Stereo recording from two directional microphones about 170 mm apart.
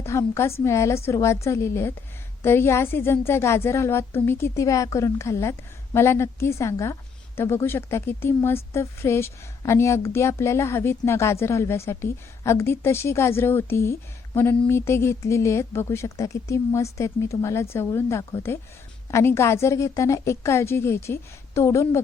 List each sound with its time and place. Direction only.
0.0 s a woman's voice: 15° left (ahead or behind)